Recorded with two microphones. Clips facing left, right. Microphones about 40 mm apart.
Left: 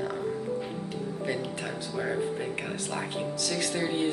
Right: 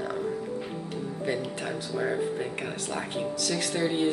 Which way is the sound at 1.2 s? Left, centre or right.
Centre.